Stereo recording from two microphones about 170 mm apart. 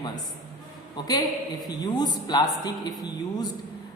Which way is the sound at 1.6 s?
25° left (ahead or behind).